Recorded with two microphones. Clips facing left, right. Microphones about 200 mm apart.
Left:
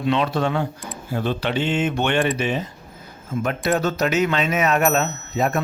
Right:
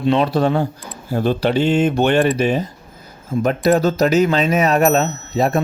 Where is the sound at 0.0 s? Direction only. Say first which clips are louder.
Right 5 dB; 30° right (ahead or behind).